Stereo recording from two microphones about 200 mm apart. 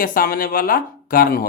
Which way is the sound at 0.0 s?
45° left (ahead or behind).